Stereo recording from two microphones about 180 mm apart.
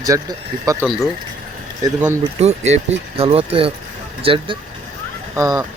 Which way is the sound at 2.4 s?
35° right (ahead or behind).